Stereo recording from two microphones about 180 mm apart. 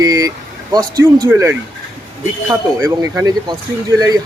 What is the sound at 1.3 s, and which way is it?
Speech, 15° right (ahead or behind).